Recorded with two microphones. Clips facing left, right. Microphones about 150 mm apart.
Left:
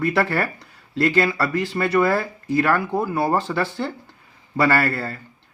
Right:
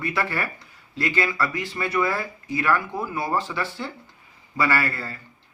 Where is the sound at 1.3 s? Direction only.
35° left (ahead or behind).